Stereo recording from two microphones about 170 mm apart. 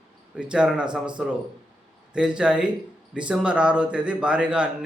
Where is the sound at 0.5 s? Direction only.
5° right (ahead or behind).